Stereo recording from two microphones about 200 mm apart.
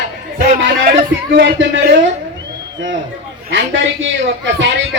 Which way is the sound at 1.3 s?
60° right (ahead or behind).